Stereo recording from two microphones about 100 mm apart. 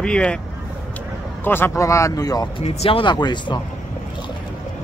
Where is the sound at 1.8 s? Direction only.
30° left (ahead or behind).